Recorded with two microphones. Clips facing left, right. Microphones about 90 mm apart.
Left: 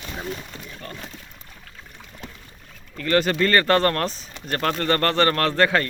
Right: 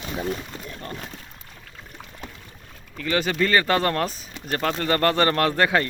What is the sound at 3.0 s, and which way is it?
Speech, centre (ahead or behind).